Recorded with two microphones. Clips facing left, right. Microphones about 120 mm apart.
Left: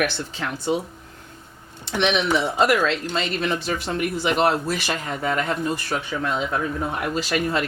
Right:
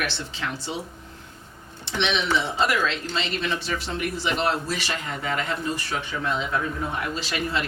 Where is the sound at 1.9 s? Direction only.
50° left (ahead or behind).